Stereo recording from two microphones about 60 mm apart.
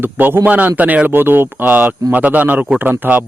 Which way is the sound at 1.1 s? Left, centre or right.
Right.